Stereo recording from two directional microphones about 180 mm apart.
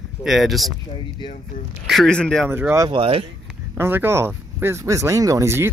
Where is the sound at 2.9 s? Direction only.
30° right (ahead or behind).